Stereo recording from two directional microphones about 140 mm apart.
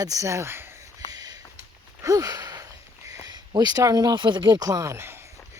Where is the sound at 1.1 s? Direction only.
30° right (ahead or behind).